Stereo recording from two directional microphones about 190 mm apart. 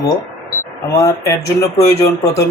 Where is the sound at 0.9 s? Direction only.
15° left (ahead or behind).